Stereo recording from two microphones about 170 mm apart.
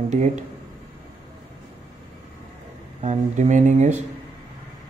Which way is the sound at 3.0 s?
45° right (ahead or behind).